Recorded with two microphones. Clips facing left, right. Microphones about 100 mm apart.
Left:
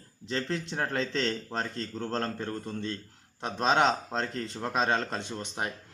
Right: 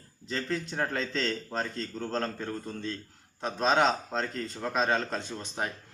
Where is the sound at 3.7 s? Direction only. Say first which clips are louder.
Even; 25° left (ahead or behind).